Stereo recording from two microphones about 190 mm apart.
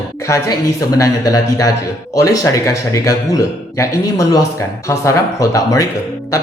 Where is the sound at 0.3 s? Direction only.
15° left (ahead or behind).